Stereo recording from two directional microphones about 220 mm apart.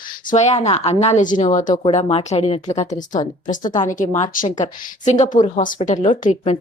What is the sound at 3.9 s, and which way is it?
A woman's voice, 35° left (ahead or behind).